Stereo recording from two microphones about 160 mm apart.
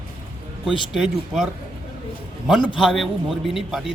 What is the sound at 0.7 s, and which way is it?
Speech, 5° right (ahead or behind).